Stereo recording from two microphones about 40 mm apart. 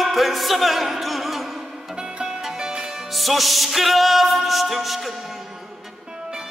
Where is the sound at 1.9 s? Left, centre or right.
Centre.